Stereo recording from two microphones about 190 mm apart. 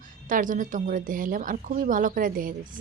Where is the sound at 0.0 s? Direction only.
45° right (ahead or behind).